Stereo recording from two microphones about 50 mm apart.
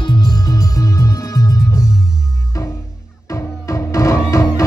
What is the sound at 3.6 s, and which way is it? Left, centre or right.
Music, left.